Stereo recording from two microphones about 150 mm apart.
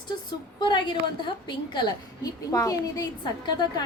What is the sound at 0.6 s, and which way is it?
A woman's voice, 30° left (ahead or behind).